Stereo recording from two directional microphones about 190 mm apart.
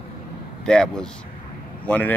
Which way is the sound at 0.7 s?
5° left (ahead or behind).